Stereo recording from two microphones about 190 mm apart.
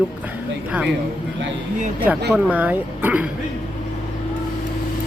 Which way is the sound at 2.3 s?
10° right (ahead or behind).